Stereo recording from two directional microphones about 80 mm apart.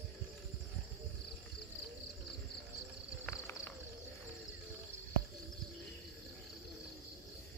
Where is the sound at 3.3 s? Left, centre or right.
Left.